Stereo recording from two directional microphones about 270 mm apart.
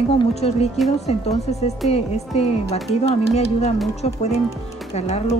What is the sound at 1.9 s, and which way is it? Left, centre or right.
Speech, left.